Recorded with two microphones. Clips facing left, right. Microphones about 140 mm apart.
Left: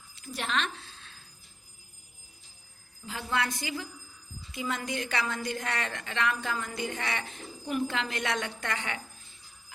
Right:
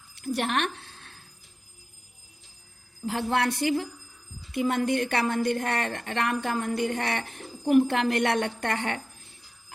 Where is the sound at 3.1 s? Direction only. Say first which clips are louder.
Right 6 dB; 65° right (ahead or behind).